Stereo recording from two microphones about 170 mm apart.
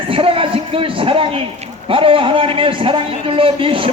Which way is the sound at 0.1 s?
30° right (ahead or behind).